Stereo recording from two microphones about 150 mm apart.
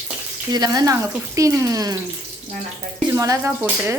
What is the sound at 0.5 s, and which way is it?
Speech, 25° right (ahead or behind).